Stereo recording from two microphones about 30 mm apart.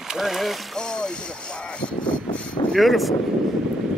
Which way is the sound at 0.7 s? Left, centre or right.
Left.